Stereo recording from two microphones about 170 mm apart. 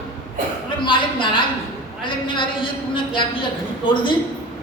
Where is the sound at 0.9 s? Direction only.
30° left (ahead or behind).